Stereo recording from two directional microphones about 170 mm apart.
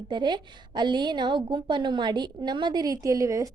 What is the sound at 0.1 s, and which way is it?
A woman's voice, 25° right (ahead or behind).